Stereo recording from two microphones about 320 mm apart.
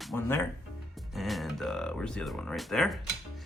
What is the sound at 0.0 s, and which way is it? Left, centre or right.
Speech, centre.